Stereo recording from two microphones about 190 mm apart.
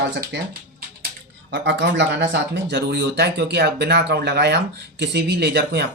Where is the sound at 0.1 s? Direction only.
60° right (ahead or behind).